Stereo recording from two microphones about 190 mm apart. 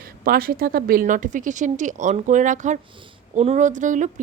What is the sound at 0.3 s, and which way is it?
A woman's voice, 50° right (ahead or behind).